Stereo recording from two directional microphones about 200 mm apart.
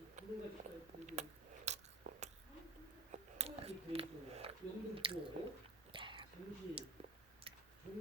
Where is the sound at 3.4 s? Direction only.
30° right (ahead or behind).